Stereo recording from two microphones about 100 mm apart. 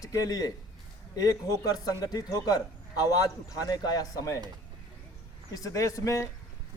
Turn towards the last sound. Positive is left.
turn(degrees=35)  # may be behind; listen again after turning